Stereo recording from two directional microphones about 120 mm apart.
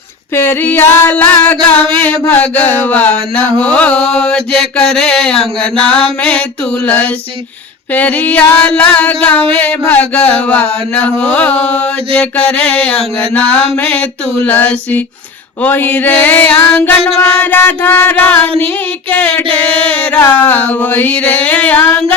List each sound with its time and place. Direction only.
0.3 s mantra: 20° left (ahead or behind)
14.4 s mantra: 15° left (ahead or behind)
19.5 s a sound: 50° right (ahead or behind)
20.2 s mantra: 15° left (ahead or behind)